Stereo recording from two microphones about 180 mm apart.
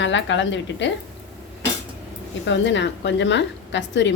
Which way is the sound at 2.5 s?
85° left.